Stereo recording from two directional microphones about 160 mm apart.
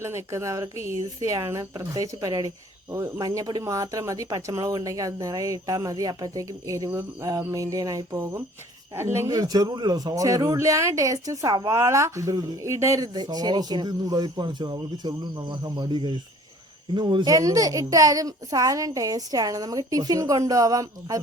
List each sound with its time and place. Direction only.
0.0 s a man's voice: 15° right (ahead or behind)